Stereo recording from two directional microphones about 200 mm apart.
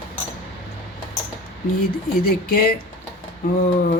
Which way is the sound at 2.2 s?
45° left (ahead or behind).